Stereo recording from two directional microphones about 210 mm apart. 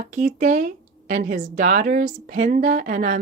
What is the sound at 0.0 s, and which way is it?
Speech, 35° right (ahead or behind).